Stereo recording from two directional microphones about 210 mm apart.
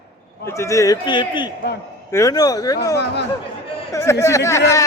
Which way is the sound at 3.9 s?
15° left (ahead or behind).